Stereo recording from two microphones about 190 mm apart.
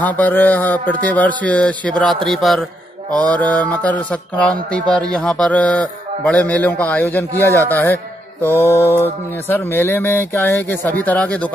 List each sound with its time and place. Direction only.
0.0 s a man's voice: 10° left (ahead or behind)